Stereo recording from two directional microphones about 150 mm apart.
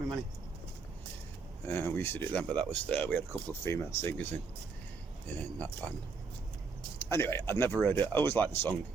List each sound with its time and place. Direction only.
1.6 s speech: 15° left (ahead or behind)
5.4 s speech: 10° left (ahead or behind)
7.0 s speech: 15° left (ahead or behind)